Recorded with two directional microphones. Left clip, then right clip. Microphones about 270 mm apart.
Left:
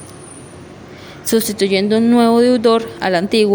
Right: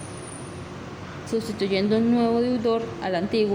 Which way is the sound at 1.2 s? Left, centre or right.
Left.